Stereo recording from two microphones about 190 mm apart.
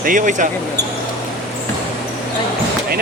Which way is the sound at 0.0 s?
45° right (ahead or behind).